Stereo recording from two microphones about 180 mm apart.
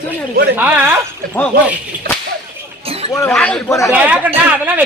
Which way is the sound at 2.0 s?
60° right (ahead or behind).